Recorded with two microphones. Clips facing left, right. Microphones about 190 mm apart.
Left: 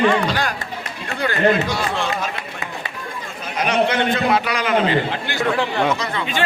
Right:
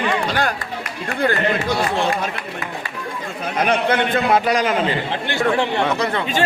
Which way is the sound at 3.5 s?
55° right (ahead or behind).